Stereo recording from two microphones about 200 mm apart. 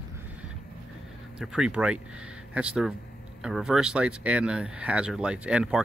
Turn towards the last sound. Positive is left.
turn(degrees=-5)  # may be behind; listen again after turning